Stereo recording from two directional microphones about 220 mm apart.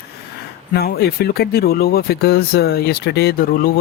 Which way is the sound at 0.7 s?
45° left (ahead or behind).